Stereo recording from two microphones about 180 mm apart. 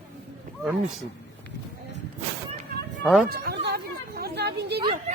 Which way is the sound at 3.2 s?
60° right (ahead or behind).